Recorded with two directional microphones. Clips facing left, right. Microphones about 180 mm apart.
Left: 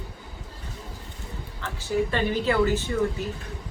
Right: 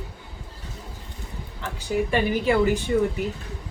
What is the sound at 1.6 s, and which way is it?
Speech, 15° right (ahead or behind).